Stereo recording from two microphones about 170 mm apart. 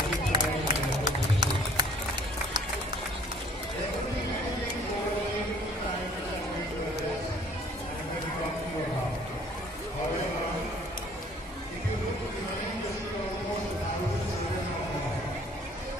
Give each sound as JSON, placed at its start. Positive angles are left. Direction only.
{"t": 0.3, "sound": "run", "side_deg": -25}